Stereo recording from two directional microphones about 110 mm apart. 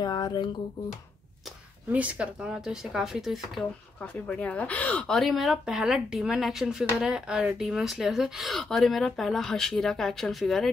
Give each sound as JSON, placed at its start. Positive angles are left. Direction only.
{"t": 0.0, "sound": "speech", "side_deg": 40}
{"t": 1.9, "sound": "speech", "side_deg": -10}
{"t": 4.0, "sound": "speech", "side_deg": 10}